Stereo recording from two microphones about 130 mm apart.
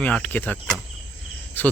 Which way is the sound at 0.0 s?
10° left (ahead or behind).